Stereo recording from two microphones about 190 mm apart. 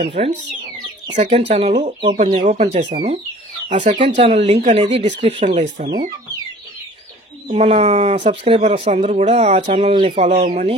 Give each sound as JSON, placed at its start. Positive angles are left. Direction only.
{"t": 0.0, "sound": "speech", "side_deg": -30}
{"t": 7.4, "sound": "speech", "side_deg": -35}
{"t": 10.2, "sound": "speech", "side_deg": -40}